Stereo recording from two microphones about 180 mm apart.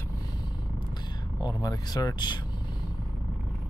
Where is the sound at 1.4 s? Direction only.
20° left (ahead or behind).